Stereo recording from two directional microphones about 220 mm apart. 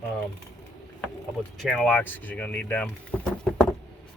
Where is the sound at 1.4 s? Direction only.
5° left (ahead or behind).